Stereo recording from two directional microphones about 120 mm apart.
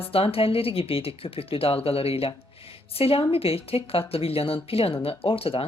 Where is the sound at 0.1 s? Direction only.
50° left (ahead or behind).